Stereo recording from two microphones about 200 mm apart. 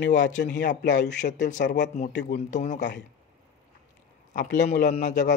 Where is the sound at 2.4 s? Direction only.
35° left (ahead or behind).